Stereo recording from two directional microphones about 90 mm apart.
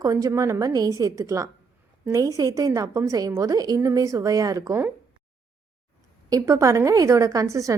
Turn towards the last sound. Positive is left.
turn(degrees=-35)  # may be behind; listen again after turning